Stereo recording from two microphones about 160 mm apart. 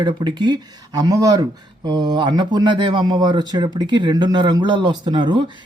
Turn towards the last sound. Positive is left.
turn(degrees=-30)  # may be behind; listen again after turning